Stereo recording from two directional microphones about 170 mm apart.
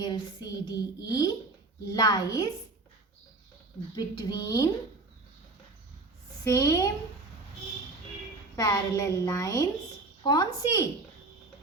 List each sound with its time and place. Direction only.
0.0 s a woman's voice: 25° left (ahead or behind)
3.9 s a woman's voice: 20° left (ahead or behind)
6.4 s a woman's voice: 20° left (ahead or behind)
8.5 s a woman's voice: 20° left (ahead or behind)